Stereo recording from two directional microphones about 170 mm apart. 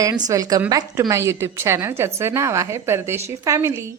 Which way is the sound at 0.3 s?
20° right (ahead or behind).